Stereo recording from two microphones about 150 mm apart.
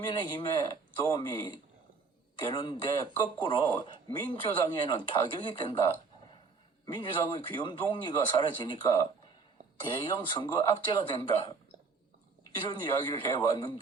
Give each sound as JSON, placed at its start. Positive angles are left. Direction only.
{"t": 0.0, "sound": "speech", "side_deg": 30}
{"t": 6.8, "sound": "speech", "side_deg": 35}
{"t": 12.6, "sound": "speech", "side_deg": 30}